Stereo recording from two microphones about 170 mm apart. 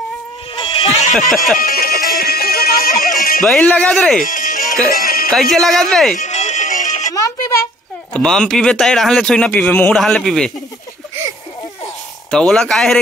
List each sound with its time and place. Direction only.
0.6 s a sound: 30° left (ahead or behind)
1.1 s speech: centre (ahead or behind)
1.6 s music: 60° left (ahead or behind)
3.4 s speech: 5° left (ahead or behind)
4.2 s music: 50° left (ahead or behind)
5.3 s speech: centre (ahead or behind)
6.2 s music: 45° left (ahead or behind)
7.1 s music: 20° left (ahead or behind)
8.1 s speech: 5° left (ahead or behind)
12.3 s speech: 5° left (ahead or behind)